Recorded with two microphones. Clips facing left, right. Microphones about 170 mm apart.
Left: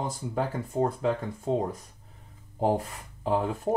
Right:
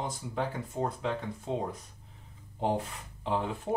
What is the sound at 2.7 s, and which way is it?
Speech, 40° left (ahead or behind).